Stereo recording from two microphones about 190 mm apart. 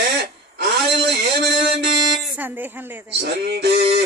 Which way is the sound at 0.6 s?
65° right (ahead or behind).